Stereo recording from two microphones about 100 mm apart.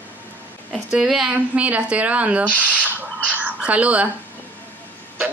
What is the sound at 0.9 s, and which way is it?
A woman's voice, 5° right (ahead or behind).